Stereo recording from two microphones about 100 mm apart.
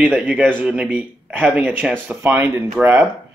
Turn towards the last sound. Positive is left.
turn(degrees=-25)  # may be behind; listen again after turning